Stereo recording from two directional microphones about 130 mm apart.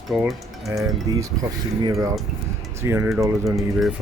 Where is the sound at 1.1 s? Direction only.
30° right (ahead or behind).